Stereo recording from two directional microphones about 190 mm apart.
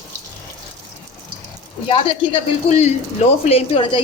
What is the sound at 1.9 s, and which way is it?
A woman's voice, 30° left (ahead or behind).